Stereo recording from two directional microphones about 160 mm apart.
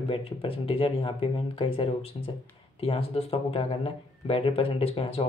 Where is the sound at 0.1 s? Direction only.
35° left (ahead or behind).